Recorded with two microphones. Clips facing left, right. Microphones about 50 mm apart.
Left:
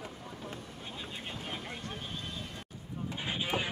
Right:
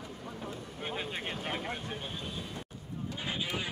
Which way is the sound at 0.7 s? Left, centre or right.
Right.